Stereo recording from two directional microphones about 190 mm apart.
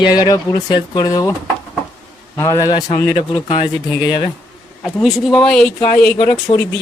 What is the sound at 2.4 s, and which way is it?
Speech, 15° left (ahead or behind).